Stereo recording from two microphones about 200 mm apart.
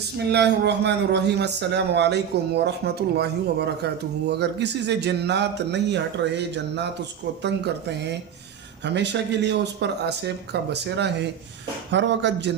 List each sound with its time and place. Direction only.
0.3 s speech: 55° right (ahead or behind)